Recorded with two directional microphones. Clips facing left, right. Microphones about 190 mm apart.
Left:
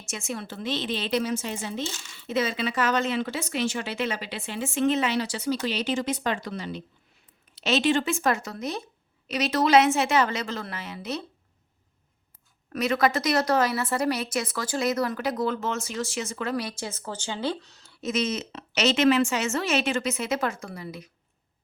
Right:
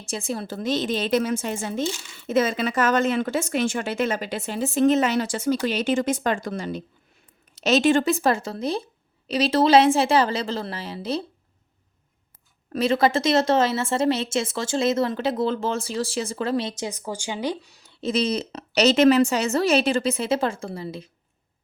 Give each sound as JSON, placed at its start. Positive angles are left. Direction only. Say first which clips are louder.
{"t": 0.0, "sound": "a woman's voice", "louder": "right 5 dB", "side_deg": -35}
{"t": 12.7, "sound": "a woman's voice", "louder": "right 4 dB", "side_deg": -30}
{"t": 18.0, "sound": "a woman's voice", "louder": "right 4 dB", "side_deg": -35}